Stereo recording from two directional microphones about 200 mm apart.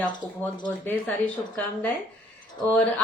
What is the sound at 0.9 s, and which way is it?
A woman's voice, 10° left (ahead or behind).